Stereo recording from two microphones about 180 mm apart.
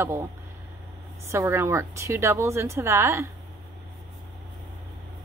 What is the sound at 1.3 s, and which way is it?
A woman's voice, 15° right (ahead or behind).